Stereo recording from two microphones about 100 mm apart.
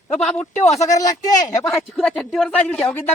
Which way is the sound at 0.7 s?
35° left (ahead or behind).